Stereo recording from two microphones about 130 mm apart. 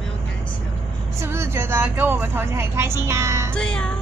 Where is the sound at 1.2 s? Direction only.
20° right (ahead or behind).